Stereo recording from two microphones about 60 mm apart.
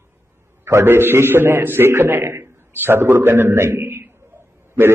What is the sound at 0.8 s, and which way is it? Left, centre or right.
A man's voice, right.